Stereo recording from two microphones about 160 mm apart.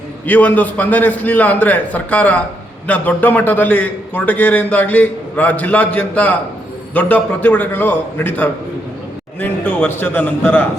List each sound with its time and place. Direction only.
0.3 s a man's voice: 10° left (ahead or behind)